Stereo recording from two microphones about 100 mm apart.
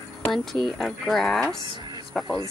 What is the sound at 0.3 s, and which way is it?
Speech, centre (ahead or behind).